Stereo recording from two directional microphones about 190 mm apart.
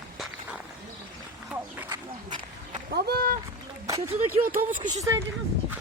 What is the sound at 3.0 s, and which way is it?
Speech, 55° right (ahead or behind).